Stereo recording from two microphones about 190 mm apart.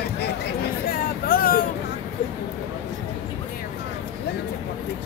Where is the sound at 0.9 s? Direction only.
50° left (ahead or behind).